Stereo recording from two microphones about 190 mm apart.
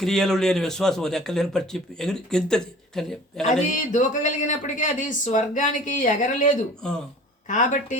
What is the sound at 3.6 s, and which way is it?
A man's voice, 40° left (ahead or behind).